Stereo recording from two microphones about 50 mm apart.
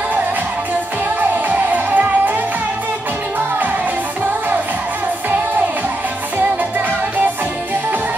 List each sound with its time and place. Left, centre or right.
1.5 s music: right